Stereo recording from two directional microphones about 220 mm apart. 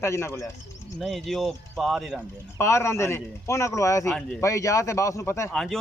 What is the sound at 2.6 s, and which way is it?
A man's voice, 10° left (ahead or behind).